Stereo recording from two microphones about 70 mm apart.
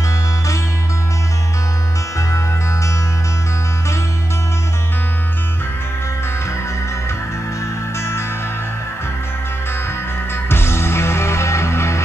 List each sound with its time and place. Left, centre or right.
8.0 s music: left
10.5 s music: left